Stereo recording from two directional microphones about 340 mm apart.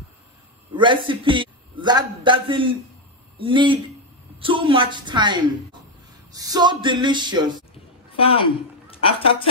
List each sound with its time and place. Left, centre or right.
0.7 s a man's voice: centre
3.3 s a sound: centre
8.2 s a woman's voice: centre